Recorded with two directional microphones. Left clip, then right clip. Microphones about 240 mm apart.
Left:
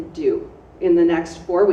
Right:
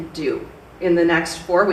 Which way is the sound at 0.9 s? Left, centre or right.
Right.